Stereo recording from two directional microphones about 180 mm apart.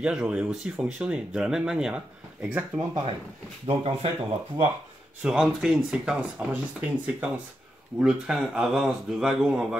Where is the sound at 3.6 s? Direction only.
35° right (ahead or behind).